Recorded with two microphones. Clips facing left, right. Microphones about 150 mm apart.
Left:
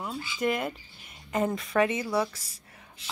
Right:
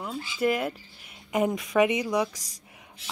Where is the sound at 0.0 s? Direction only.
5° right (ahead or behind).